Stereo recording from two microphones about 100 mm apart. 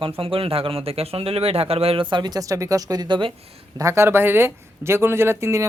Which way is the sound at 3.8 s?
30° right (ahead or behind).